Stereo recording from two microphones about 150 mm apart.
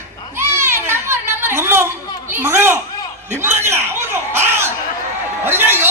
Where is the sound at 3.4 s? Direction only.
15° right (ahead or behind).